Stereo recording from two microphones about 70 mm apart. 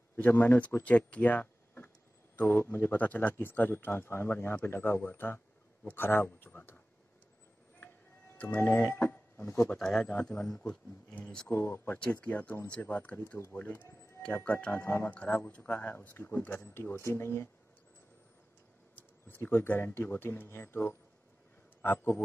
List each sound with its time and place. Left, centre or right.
0.1 s a man's voice: left
8.4 s speech: left
9.8 s a man's voice: centre
11.5 s speech: left
12.6 s a man's voice: centre
12.9 s a man's voice: left
14.8 s speech: left
15.0 s a man's voice: left
18.9 s speech: left